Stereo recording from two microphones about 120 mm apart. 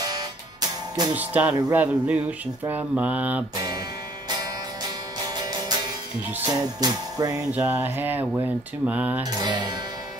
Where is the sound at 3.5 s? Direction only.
30° right (ahead or behind).